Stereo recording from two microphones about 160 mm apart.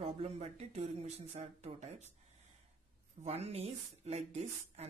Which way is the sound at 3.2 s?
40° right (ahead or behind).